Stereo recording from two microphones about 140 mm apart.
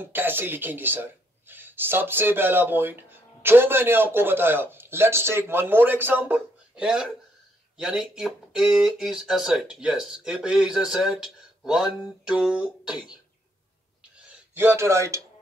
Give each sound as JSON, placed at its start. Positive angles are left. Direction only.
{"t": 0.0, "sound": "speech", "side_deg": -15}
{"t": 14.5, "sound": "a man's voice", "side_deg": -15}